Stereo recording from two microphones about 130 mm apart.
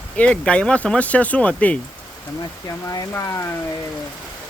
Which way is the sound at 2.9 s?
25° left (ahead or behind).